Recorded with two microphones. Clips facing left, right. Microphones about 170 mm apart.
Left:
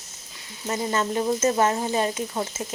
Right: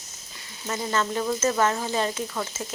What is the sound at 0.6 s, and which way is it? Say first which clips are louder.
Speech: left 2 dB; 20° left (ahead or behind).